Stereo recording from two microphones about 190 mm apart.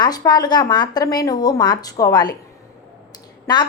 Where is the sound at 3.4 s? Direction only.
20° left (ahead or behind).